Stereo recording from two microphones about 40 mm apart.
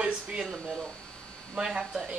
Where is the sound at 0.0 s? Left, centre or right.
Right.